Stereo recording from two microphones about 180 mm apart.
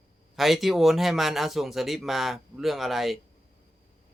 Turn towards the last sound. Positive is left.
turn(degrees=0)  # may be behind; listen again after turning